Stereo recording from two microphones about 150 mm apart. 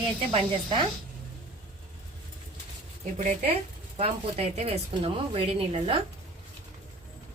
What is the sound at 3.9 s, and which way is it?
Speech, 40° right (ahead or behind).